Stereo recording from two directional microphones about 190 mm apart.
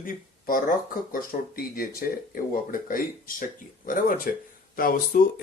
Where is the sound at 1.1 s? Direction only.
50° left (ahead or behind).